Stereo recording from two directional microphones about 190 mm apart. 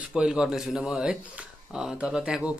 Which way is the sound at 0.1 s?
5° right (ahead or behind).